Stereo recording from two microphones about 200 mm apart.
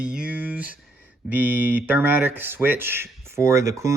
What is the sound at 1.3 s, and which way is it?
Speech, 10° right (ahead or behind).